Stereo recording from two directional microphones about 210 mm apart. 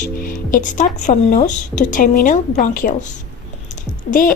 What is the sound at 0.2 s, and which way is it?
A woman's voice, 40° left (ahead or behind).